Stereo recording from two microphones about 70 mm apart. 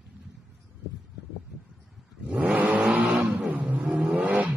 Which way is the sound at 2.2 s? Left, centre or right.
Centre.